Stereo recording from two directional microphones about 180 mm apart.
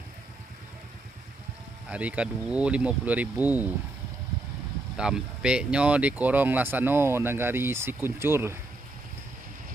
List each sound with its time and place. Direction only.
1.9 s speech: 5° right (ahead or behind)
4.9 s speech: 5° right (ahead or behind)